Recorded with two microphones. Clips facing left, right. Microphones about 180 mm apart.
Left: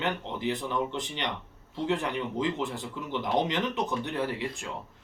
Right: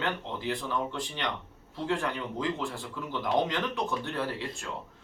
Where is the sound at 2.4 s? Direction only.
20° left (ahead or behind).